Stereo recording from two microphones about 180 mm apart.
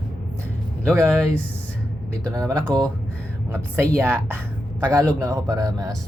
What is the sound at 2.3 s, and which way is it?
Speech, 20° right (ahead or behind).